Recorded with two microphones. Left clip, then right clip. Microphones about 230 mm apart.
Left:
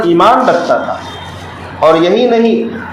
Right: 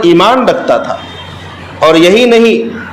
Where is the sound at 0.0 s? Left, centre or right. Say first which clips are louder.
Right 1 dB; right.